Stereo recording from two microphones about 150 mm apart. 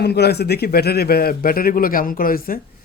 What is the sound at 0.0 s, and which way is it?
A man's voice, 90° left.